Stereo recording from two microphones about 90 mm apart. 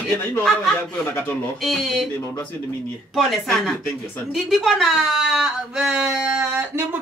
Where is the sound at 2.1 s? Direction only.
30° left (ahead or behind).